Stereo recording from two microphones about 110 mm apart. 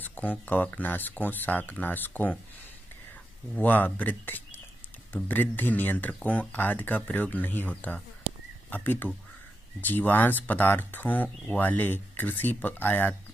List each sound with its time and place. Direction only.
0.0 s speech: 15° left (ahead or behind)
3.5 s speech: 15° left (ahead or behind)